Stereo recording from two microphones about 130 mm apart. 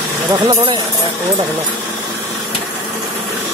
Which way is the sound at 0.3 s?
30° right (ahead or behind).